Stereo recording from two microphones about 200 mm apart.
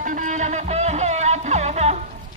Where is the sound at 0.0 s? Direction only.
40° right (ahead or behind).